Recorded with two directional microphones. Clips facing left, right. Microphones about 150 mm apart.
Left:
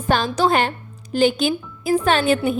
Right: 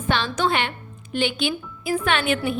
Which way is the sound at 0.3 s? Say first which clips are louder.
Left 5 dB; 40° left (ahead or behind).